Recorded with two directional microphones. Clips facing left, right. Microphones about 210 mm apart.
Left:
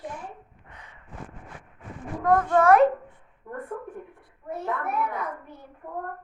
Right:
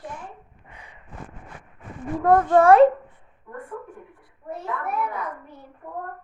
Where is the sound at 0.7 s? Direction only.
10° right (ahead or behind).